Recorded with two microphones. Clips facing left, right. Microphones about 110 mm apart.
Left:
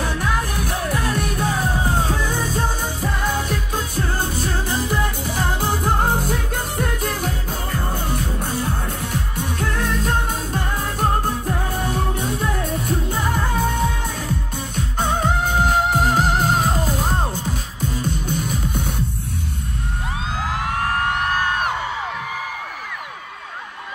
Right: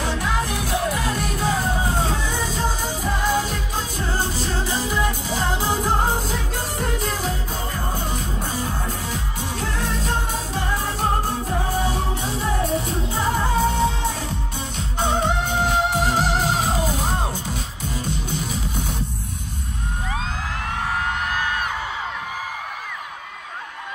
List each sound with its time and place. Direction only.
0.0 s music: 45° left (ahead or behind)
14.8 s music: 45° left (ahead or behind)